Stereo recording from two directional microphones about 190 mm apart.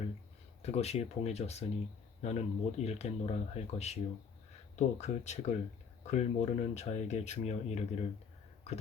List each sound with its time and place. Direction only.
0.6 s speech: 35° left (ahead or behind)